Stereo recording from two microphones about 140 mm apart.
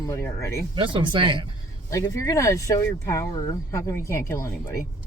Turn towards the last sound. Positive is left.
turn(degrees=25)  # may be behind; listen again after turning